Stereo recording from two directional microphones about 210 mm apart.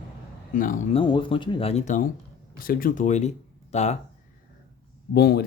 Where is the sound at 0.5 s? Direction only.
40° left (ahead or behind).